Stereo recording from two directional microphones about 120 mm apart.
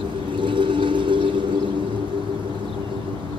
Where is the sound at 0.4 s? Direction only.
40° right (ahead or behind).